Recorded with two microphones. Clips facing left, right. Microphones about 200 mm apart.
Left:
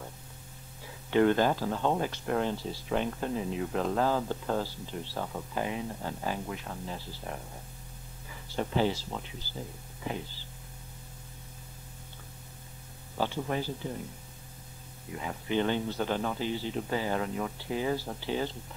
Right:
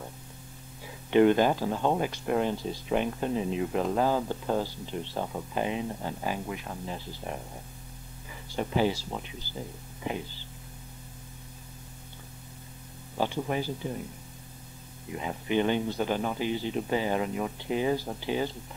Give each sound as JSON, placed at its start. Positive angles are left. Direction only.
{"t": 1.1, "sound": "speech", "side_deg": -15}
{"t": 8.5, "sound": "speech", "side_deg": -10}
{"t": 13.2, "sound": "speech", "side_deg": -15}
{"t": 15.1, "sound": "speech", "side_deg": -20}